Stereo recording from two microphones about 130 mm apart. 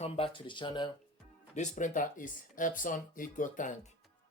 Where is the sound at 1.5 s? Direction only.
65° left (ahead or behind).